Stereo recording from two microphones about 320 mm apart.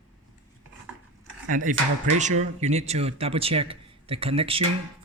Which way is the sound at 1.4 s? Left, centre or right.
Right.